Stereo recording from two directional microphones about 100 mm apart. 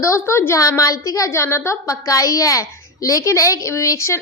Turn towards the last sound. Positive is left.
turn(degrees=30)  # may be behind; listen again after turning